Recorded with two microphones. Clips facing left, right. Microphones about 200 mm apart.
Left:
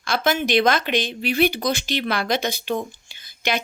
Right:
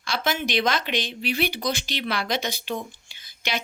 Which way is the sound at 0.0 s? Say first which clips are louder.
Left 5 dB; 50° left (ahead or behind).